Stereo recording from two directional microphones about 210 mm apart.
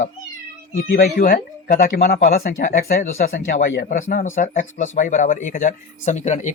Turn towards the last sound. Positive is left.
turn(degrees=35)  # may be behind; listen again after turning